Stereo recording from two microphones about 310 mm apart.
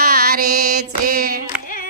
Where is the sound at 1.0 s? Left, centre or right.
Right.